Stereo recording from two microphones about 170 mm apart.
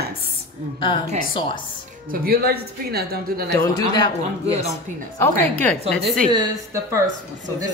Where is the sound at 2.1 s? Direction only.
60° right (ahead or behind).